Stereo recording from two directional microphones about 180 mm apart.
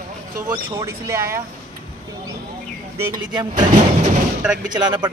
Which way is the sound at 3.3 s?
25° right (ahead or behind).